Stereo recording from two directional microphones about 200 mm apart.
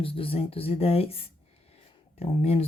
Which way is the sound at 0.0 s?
25° left (ahead or behind).